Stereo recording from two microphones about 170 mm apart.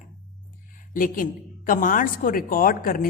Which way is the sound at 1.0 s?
55° left (ahead or behind).